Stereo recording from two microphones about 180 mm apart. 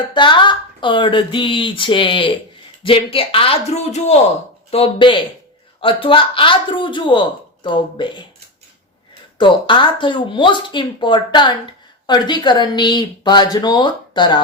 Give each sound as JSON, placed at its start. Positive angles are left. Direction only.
{"t": 0.1, "sound": "a man's voice", "side_deg": 25}
{"t": 9.4, "sound": "speech", "side_deg": 25}